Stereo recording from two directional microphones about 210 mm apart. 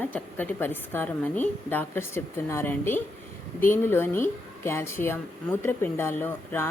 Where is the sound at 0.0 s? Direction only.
10° left (ahead or behind).